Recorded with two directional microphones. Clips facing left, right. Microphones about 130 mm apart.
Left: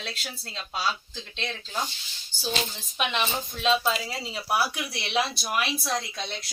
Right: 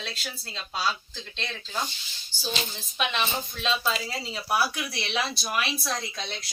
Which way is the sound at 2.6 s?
15° left (ahead or behind).